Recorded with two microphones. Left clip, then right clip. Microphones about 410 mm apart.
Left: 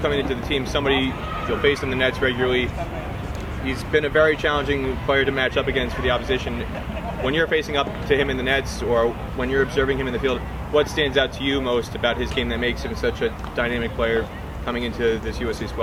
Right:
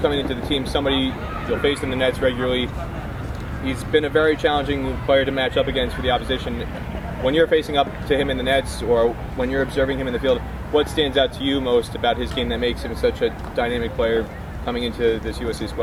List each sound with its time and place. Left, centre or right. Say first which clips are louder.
0.0 s speech: right 1 dB; left
3.7 s speech: right 2 dB; left
7.3 s speech: right 4 dB; centre